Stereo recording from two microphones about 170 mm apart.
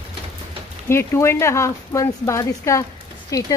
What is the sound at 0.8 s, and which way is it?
Speech, 15° left (ahead or behind).